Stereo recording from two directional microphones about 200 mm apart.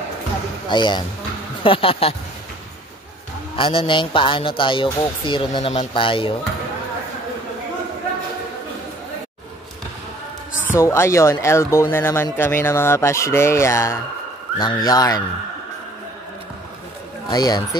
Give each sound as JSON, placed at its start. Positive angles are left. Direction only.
{"t": 0.7, "sound": "speech", "side_deg": 20}
{"t": 3.5, "sound": "speech", "side_deg": 25}
{"t": 10.8, "sound": "speech", "side_deg": 15}
{"t": 17.3, "sound": "speech", "side_deg": 20}